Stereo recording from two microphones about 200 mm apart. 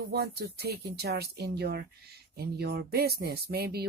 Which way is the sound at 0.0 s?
50° right (ahead or behind).